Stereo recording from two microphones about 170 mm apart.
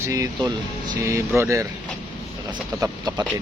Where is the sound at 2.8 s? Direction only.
20° right (ahead or behind).